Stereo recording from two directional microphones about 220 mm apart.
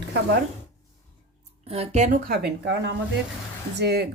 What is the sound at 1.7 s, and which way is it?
Speech, 30° right (ahead or behind).